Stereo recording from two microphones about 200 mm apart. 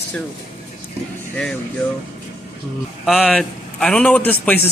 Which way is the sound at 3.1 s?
Centre (ahead or behind).